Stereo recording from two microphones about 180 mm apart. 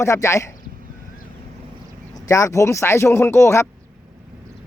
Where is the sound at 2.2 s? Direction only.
15° left (ahead or behind).